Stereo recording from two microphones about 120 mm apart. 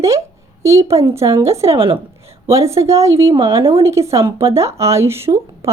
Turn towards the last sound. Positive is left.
turn(degrees=-20)  # may be behind; listen again after turning